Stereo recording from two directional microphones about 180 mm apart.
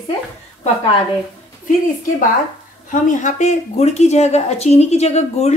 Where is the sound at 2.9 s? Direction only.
45° left (ahead or behind).